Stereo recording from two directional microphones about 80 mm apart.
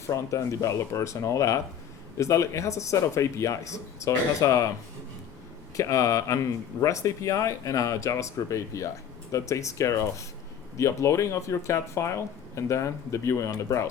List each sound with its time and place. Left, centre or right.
0.1 s speech: left
5.7 s speech: left